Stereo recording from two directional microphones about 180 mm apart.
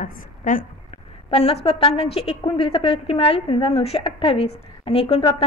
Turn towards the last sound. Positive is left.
turn(degrees=35)  # may be behind; listen again after turning